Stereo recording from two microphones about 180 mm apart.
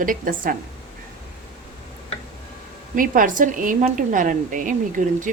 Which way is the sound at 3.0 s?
50° right (ahead or behind).